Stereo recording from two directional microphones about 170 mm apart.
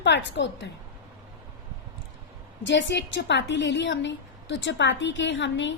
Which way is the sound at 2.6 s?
90° left.